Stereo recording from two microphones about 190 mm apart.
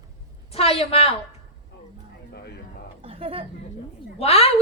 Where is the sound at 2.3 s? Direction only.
60° left (ahead or behind).